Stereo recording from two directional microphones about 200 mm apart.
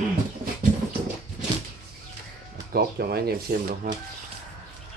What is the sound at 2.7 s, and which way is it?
Speech, 50° right (ahead or behind).